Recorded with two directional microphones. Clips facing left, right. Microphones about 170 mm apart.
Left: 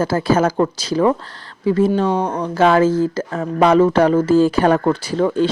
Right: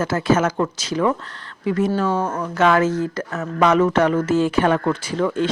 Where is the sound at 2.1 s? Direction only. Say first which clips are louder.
Left 3 dB; 15° left (ahead or behind).